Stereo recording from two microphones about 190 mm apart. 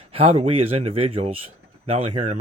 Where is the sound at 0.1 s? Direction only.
30° right (ahead or behind).